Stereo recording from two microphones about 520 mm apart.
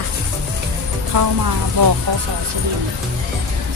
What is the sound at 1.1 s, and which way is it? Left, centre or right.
Speech, right.